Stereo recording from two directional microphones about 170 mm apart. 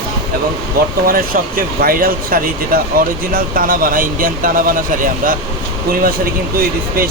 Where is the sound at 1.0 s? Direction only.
60° right (ahead or behind).